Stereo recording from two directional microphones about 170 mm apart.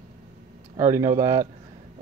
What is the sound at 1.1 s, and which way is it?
Speech, 20° right (ahead or behind).